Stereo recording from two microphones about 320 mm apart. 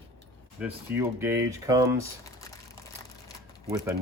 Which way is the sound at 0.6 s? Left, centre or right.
Centre.